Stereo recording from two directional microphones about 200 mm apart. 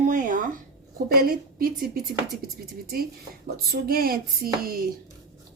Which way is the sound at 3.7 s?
50° right (ahead or behind).